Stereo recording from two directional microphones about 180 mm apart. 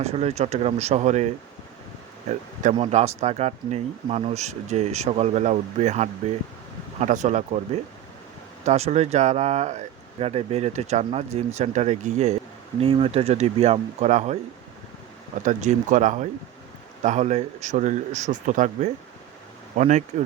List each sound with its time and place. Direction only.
0.0 s speech: 35° right (ahead or behind)
2.7 s speech: 35° right (ahead or behind)
8.6 s speech: 35° right (ahead or behind)
15.4 s speech: 45° right (ahead or behind)